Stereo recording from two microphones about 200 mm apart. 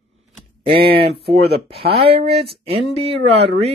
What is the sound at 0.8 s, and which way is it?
Speech, 30° right (ahead or behind).